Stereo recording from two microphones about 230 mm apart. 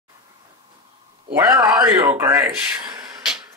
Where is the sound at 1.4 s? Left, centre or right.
Centre.